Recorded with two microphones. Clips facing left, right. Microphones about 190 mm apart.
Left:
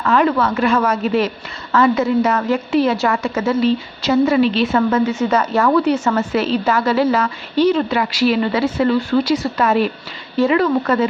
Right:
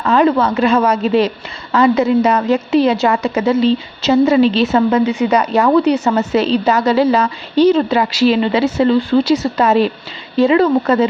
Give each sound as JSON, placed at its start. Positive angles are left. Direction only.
{"t": 0.0, "sound": "a woman's voice", "side_deg": -25}
{"t": 7.6, "sound": "a woman's voice", "side_deg": -30}